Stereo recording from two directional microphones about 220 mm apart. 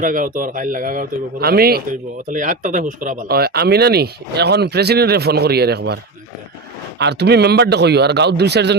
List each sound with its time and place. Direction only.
0.0 s a man's voice: 35° right (ahead or behind)
7.0 s speech: 50° right (ahead or behind)